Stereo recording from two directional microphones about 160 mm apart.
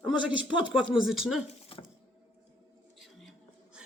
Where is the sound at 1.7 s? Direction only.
35° left (ahead or behind).